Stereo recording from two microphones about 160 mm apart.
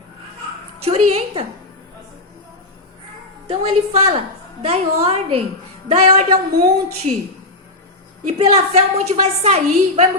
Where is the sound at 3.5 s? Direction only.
40° right (ahead or behind).